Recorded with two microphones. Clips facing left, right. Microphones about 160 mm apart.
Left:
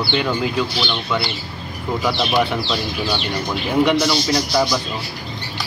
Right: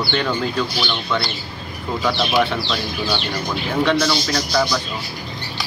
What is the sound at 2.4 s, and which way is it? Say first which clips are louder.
Speech: left 1 dB; 10° left (ahead or behind).